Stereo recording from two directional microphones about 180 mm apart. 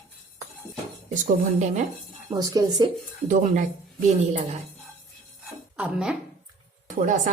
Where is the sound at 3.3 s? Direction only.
45° right (ahead or behind).